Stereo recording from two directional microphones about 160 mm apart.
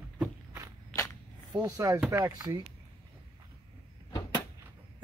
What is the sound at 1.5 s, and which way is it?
Speech, 20° right (ahead or behind).